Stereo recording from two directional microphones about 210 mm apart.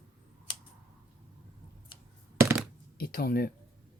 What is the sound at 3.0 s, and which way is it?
Speech, 45° left (ahead or behind).